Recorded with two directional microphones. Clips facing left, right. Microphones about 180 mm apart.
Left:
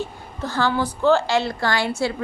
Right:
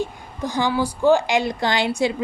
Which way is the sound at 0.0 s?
15° right (ahead or behind).